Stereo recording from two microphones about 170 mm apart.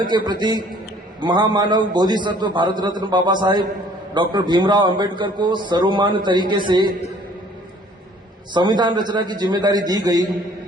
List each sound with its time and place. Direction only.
0.1 s a man's voice: 25° right (ahead or behind)
8.5 s a man's voice: 25° right (ahead or behind)